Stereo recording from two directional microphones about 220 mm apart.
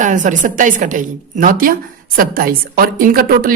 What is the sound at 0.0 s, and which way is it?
A woman's voice, 35° right (ahead or behind).